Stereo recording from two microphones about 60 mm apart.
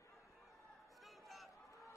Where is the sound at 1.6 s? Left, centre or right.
Left.